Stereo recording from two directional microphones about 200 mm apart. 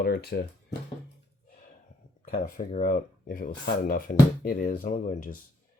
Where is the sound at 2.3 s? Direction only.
45° left (ahead or behind).